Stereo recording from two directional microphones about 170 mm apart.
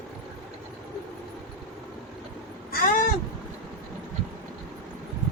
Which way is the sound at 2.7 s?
55° left (ahead or behind).